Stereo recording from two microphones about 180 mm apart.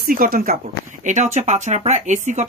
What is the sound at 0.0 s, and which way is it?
Speech, 55° right (ahead or behind).